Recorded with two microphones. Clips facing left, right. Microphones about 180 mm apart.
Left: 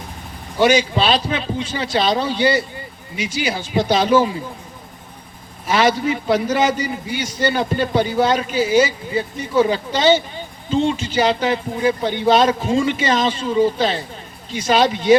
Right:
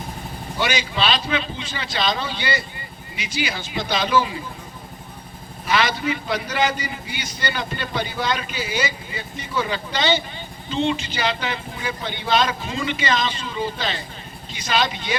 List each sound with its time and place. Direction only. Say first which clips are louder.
0.6 s a man's voice: left 8 dB; 45° left (ahead or behind)
5.6 s a man's voice: left 5 dB; 45° left (ahead or behind)